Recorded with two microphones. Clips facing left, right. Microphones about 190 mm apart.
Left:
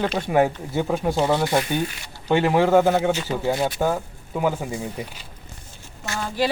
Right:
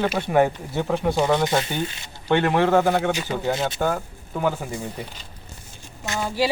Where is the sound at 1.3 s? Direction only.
20° right (ahead or behind).